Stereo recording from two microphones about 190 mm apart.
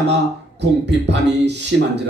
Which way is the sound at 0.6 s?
65° right (ahead or behind).